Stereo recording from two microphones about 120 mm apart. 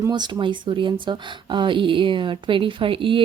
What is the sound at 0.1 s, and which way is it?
Speech, 40° right (ahead or behind).